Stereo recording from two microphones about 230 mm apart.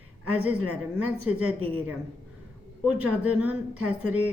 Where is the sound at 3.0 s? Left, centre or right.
Right.